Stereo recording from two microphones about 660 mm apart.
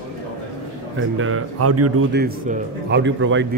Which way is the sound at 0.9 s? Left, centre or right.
Centre.